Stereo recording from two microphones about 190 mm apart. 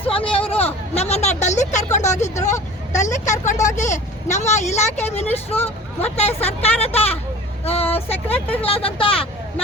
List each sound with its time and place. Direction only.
0.1 s a sound: 30° left (ahead or behind)
2.1 s speech: 40° left (ahead or behind)
2.5 s vehicle: 40° left (ahead or behind)
3.8 s speech: 40° left (ahead or behind)
7.6 s vehicle: 30° left (ahead or behind)
8.1 s speech: 10° left (ahead or behind)
8.6 s speech: 30° left (ahead or behind)